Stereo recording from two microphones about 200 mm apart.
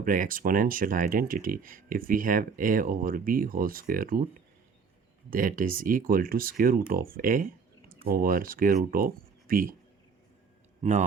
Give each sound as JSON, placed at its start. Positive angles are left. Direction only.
{"t": 0.0, "sound": "speech", "side_deg": -45}
{"t": 5.3, "sound": "speech", "side_deg": -45}